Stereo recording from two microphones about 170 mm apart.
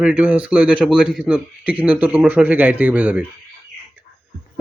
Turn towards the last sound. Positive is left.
turn(degrees=-10)  # may be behind; listen again after turning